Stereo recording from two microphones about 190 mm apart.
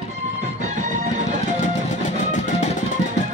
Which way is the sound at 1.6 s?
40° left (ahead or behind).